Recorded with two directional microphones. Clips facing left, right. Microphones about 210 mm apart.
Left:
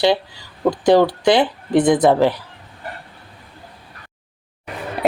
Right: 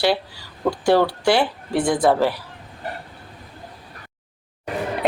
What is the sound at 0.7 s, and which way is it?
Speech, 20° left (ahead or behind).